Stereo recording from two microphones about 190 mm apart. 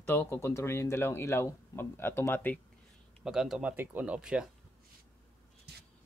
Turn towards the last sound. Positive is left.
turn(degrees=-60)  # may be behind; listen again after turning